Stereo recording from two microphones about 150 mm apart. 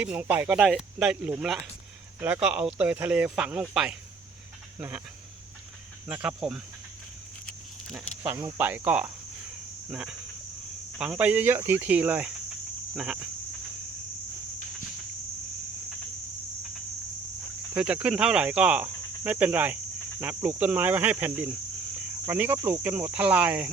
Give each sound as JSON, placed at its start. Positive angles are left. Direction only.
{"t": 0.0, "sound": "speech", "side_deg": -10}
{"t": 6.1, "sound": "speech", "side_deg": -5}
{"t": 7.4, "sound": "a sound", "side_deg": 5}
{"t": 8.5, "sound": "speech", "side_deg": -10}
{"t": 17.7, "sound": "speech", "side_deg": -10}